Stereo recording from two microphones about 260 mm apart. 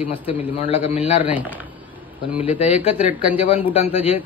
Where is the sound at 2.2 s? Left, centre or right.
Centre.